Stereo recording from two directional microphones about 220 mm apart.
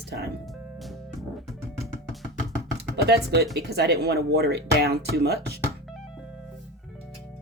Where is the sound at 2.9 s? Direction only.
45° right (ahead or behind).